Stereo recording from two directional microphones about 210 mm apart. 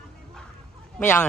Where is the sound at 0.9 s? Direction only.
5° left (ahead or behind).